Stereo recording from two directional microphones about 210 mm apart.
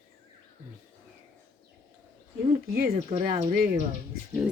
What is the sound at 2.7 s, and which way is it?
Speech, 45° right (ahead or behind).